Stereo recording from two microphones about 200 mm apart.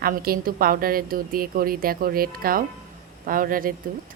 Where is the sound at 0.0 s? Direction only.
45° right (ahead or behind).